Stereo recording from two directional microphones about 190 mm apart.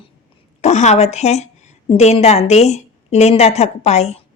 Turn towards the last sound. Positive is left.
turn(degrees=35)  # may be behind; listen again after turning